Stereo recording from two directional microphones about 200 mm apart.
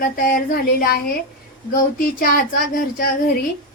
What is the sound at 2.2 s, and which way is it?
Speech, 45° left (ahead or behind).